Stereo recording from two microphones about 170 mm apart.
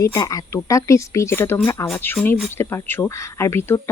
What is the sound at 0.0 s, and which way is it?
Speech, 20° left (ahead or behind).